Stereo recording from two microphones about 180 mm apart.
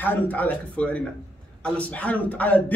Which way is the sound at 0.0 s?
10° left (ahead or behind).